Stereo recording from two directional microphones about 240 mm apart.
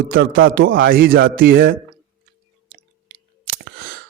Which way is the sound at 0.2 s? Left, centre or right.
Right.